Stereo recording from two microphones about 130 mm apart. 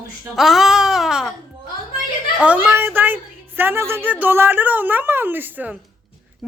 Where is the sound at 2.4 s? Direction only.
15° right (ahead or behind).